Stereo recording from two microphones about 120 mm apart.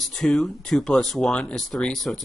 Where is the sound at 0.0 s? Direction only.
Centre (ahead or behind).